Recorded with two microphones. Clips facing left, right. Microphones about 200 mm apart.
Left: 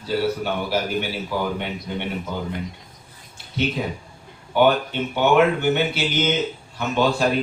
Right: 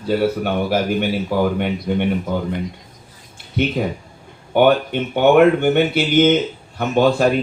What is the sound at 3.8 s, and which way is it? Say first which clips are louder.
Speech: right 5 dB; 55° right (ahead or behind).